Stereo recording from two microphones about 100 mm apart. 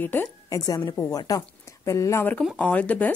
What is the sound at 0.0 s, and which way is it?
Speech, 20° left (ahead or behind).